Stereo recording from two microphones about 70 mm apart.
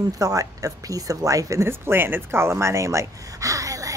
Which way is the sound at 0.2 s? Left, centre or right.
Right.